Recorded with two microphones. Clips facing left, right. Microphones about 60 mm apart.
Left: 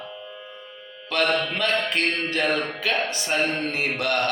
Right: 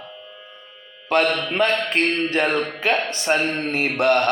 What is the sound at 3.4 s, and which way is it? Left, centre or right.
Speech, right.